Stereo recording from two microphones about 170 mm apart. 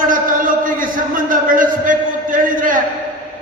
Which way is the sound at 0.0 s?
50° right (ahead or behind).